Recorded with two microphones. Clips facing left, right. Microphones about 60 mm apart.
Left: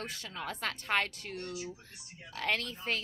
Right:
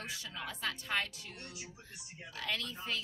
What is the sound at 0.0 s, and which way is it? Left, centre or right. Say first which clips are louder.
A woman's voice: left 3 dB; left.